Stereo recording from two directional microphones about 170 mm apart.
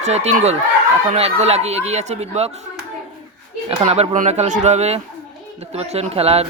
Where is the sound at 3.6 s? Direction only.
35° right (ahead or behind).